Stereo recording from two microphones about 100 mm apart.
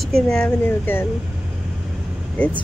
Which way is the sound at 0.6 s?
20° left (ahead or behind).